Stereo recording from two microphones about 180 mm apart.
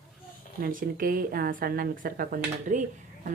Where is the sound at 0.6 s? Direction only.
50° right (ahead or behind).